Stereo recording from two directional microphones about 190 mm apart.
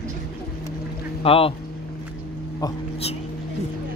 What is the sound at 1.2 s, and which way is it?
Speech, 30° left (ahead or behind).